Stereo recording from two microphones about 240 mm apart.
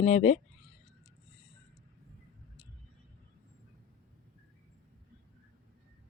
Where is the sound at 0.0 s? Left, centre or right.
Left.